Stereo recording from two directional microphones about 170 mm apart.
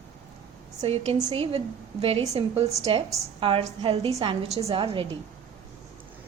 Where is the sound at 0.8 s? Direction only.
40° right (ahead or behind).